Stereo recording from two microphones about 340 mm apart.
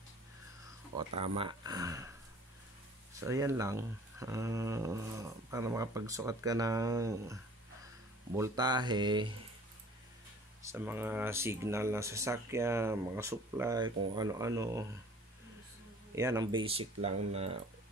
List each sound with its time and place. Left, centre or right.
1.2 s speech: centre
3.2 s speech: centre
8.4 s speech: centre
10.6 s speech: centre
16.2 s speech: centre